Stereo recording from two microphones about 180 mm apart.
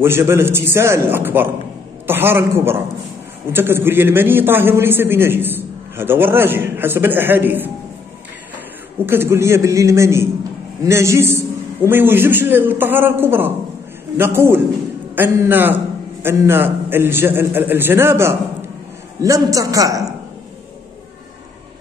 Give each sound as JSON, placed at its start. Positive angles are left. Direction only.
{"t": 0.0, "sound": "a man's voice", "side_deg": -15}
{"t": 9.0, "sound": "a man's voice", "side_deg": -15}